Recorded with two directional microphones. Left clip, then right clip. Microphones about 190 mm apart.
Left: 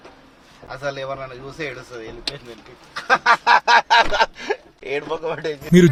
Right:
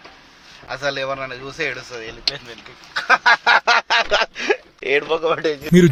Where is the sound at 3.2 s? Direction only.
30° right (ahead or behind).